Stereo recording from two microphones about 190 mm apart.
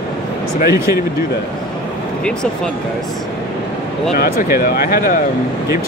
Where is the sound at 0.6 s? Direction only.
15° right (ahead or behind).